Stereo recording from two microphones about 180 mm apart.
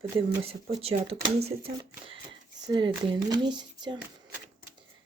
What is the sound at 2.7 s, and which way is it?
Speech, 25° right (ahead or behind).